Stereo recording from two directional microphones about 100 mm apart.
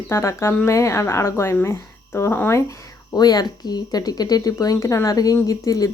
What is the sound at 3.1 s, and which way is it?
Speech, 40° left (ahead or behind).